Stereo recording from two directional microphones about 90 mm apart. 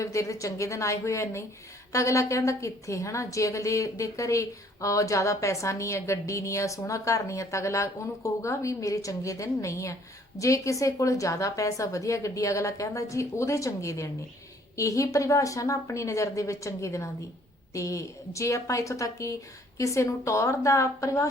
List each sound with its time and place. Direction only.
0.0 s a woman's voice: 35° left (ahead or behind)